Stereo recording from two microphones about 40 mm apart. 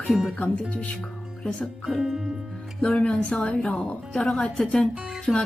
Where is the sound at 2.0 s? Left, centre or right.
Centre.